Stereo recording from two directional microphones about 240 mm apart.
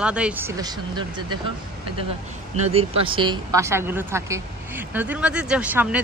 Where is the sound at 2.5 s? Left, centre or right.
Right; by 6.0 s centre.